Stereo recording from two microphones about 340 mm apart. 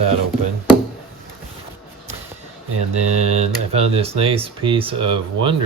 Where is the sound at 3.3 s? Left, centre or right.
Centre.